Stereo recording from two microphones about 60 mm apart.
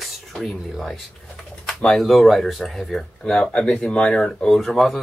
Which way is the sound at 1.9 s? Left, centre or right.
Centre.